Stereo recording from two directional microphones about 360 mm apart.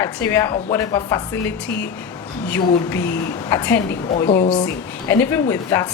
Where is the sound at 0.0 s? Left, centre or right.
Centre.